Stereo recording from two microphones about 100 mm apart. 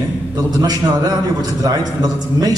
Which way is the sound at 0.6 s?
40° right (ahead or behind).